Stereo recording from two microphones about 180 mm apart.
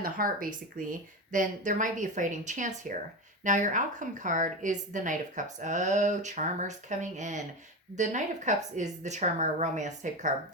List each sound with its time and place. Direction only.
0.0 s a woman's voice: 50° right (ahead or behind)